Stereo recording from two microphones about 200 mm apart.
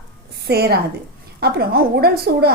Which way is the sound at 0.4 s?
50° right (ahead or behind).